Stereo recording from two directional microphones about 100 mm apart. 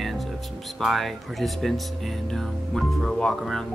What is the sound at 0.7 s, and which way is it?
Speech, centre (ahead or behind).